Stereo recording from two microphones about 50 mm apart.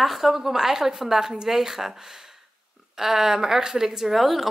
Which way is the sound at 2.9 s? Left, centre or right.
Centre.